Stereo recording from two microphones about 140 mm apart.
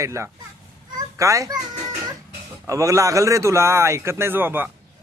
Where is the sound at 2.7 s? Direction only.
20° right (ahead or behind).